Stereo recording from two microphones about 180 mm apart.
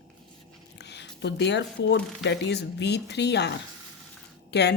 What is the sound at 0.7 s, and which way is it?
Speech, 70° left (ahead or behind).